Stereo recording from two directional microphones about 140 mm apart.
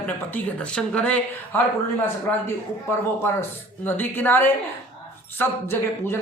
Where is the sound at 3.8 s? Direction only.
15° left (ahead or behind).